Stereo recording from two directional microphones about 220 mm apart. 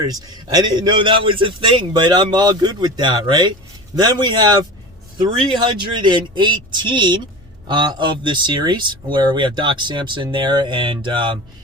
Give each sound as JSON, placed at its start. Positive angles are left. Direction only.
{"t": 0.0, "sound": "speech", "side_deg": -15}